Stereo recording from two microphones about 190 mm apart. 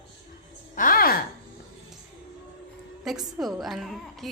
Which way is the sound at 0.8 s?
50° left (ahead or behind).